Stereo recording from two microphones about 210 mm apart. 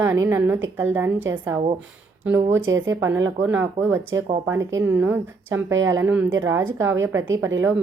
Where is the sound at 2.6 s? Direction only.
65° right (ahead or behind).